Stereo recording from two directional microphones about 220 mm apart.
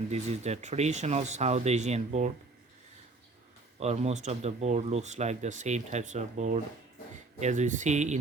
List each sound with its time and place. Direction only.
0.1 s speech: 30° right (ahead or behind)
3.8 s speech: 30° right (ahead or behind)